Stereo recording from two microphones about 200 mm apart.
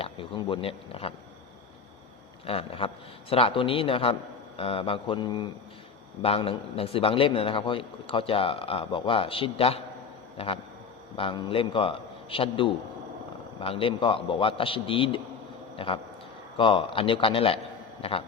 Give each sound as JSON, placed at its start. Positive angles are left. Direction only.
{"t": 0.0, "sound": "a man's voice", "side_deg": 25}
{"t": 2.5, "sound": "a man's voice", "side_deg": 25}